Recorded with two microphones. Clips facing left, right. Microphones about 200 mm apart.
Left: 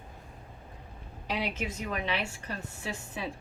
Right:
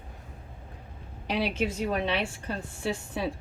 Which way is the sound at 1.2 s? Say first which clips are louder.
Right 5 dB; 30° right (ahead or behind).